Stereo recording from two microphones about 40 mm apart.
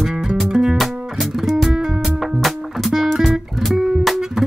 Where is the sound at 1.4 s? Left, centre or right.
Centre.